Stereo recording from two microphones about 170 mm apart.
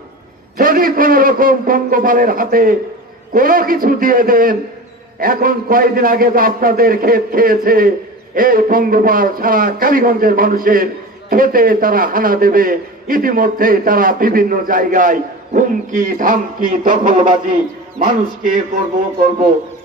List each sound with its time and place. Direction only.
0.6 s a man's voice: 55° right (ahead or behind)